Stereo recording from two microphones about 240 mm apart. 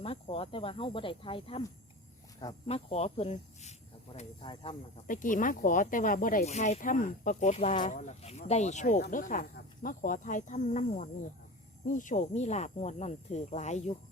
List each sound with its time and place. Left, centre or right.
0.0 s speech: left
5.0 s speech: left